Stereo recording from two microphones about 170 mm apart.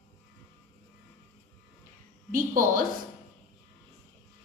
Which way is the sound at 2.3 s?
55° right (ahead or behind).